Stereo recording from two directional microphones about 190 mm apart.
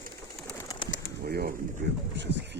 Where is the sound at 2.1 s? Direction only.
65° right (ahead or behind).